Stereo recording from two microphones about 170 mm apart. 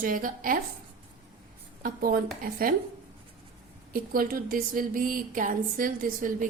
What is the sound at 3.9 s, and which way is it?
A woman's voice, 55° right (ahead or behind).